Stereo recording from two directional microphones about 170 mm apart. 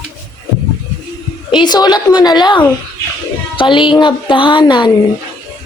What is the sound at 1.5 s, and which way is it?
Speech, 25° left (ahead or behind).